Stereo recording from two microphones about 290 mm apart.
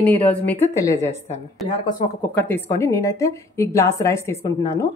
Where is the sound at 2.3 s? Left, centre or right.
Centre.